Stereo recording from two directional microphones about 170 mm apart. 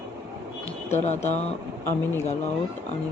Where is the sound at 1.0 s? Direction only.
40° left (ahead or behind).